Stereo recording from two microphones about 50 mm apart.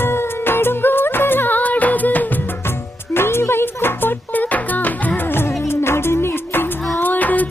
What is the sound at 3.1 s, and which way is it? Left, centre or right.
Music, left.